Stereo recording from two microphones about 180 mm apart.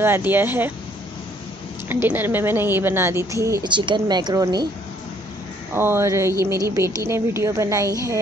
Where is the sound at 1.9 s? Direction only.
10° right (ahead or behind).